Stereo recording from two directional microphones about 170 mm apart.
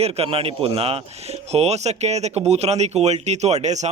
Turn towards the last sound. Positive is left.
turn(degrees=-40)  # may be behind; listen again after turning